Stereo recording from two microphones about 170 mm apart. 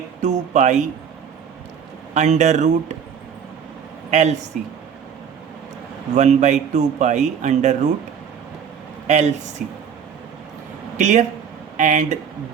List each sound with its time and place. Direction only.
0.2 s speech: 45° right (ahead or behind)
2.1 s speech: 45° right (ahead or behind)
4.1 s speech: 45° right (ahead or behind)
6.1 s speech: 45° right (ahead or behind)
9.0 s speech: 45° right (ahead or behind)
10.9 s speech: 45° right (ahead or behind)